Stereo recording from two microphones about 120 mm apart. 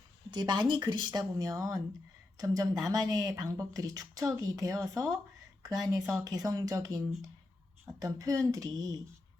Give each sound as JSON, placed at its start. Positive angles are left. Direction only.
{"t": 0.3, "sound": "speech", "side_deg": -40}
{"t": 8.0, "sound": "speech", "side_deg": -30}